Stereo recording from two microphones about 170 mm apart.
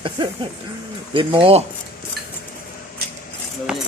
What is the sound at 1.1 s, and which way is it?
Speech, 30° right (ahead or behind).